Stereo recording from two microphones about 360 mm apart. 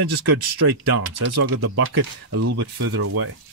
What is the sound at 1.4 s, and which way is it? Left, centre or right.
Speech, right.